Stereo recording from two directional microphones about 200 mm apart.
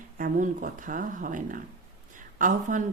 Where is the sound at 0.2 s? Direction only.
40° right (ahead or behind).